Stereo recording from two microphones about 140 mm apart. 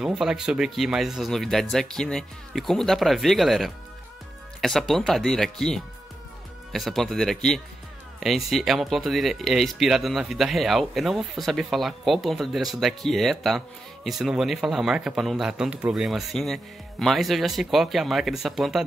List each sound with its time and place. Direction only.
0.0 s a man's voice: 5° right (ahead or behind)